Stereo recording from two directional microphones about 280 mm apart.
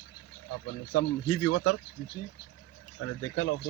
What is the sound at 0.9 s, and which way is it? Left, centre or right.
Speech, left.